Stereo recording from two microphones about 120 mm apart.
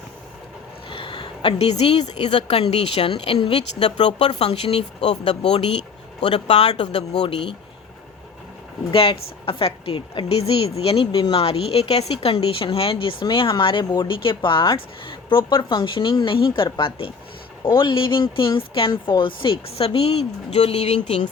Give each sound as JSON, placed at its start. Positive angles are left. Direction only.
{"t": 0.9, "sound": "a sound", "side_deg": 45}
{"t": 1.5, "sound": "speech", "side_deg": 60}
{"t": 8.9, "sound": "speech", "side_deg": 50}
{"t": 11.0, "sound": "speech", "side_deg": 45}